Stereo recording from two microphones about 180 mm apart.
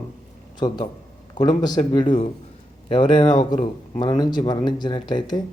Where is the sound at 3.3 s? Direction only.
45° left (ahead or behind).